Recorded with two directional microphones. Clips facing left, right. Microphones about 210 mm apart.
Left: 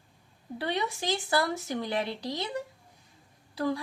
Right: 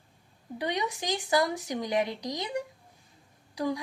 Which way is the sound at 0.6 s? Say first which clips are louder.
Even; 15° right (ahead or behind).